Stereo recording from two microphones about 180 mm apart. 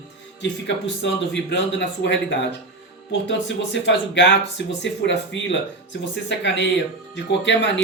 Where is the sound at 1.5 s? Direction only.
75° left (ahead or behind).